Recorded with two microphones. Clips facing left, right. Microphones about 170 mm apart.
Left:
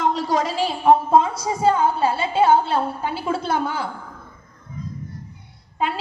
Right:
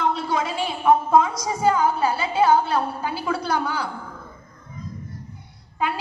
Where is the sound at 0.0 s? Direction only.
40° left (ahead or behind); by 3.8 s 25° left (ahead or behind).